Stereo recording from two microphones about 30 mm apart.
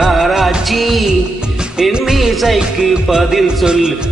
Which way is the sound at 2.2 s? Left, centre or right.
Centre.